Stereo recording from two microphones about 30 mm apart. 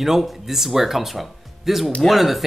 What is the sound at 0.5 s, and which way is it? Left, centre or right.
Speech, centre.